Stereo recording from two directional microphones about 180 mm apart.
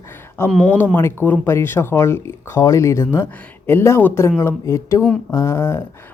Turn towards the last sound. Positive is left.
turn(degrees=15)  # may be behind; listen again after turning